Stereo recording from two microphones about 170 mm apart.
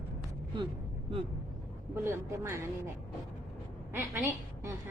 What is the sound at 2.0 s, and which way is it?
Speech, 15° right (ahead or behind).